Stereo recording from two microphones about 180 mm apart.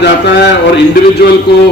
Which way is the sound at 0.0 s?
70° left (ahead or behind).